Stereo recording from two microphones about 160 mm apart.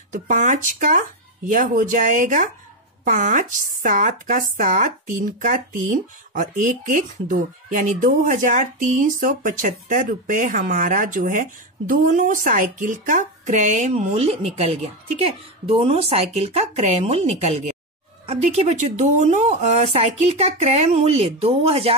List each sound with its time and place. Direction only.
0.1 s speech: 50° right (ahead or behind)